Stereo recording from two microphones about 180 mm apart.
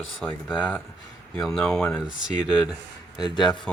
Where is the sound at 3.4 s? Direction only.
5° left (ahead or behind).